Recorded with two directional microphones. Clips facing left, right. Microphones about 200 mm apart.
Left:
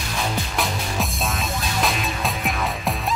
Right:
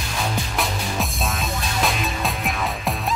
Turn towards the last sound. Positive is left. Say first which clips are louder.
# even
turn(degrees=0)  # may be behind; listen again after turning